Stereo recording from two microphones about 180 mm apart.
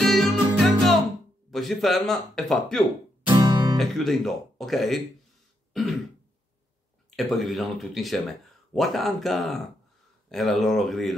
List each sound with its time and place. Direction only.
0.0 s music: centre (ahead or behind)
1.5 s speech: centre (ahead or behind)
3.3 s music: 25° right (ahead or behind)
3.7 s speech: centre (ahead or behind)
5.7 s throat clearing: centre (ahead or behind)
7.2 s speech: centre (ahead or behind)